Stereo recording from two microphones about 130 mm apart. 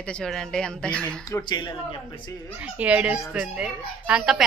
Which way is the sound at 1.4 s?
35° left (ahead or behind).